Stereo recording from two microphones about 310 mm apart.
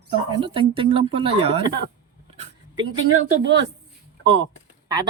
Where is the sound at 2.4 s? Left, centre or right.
Centre.